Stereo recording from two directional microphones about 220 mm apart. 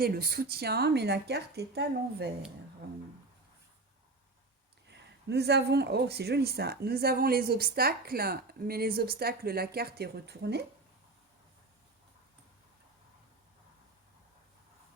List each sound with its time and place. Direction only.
0.0 s speech: 45° right (ahead or behind)
4.9 s speech: 50° right (ahead or behind)